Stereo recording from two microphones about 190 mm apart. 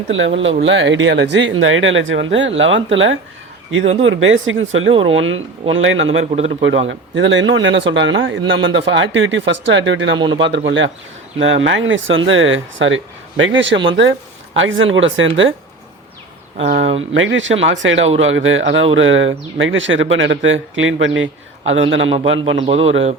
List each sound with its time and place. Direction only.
0.1 s speech: 90° right
6.1 s a man's voice: 35° right (ahead or behind)
6.6 s a man's voice: 75° right (ahead or behind)
10.2 s a man's voice: 25° right (ahead or behind)
10.7 s speech: 80° right
14.5 s speech: 90° right
17.2 s speech: 85° right
22.6 s a man's voice: 30° right (ahead or behind)